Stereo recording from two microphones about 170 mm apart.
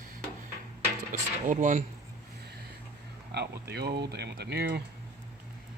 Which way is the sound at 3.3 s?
75° right (ahead or behind).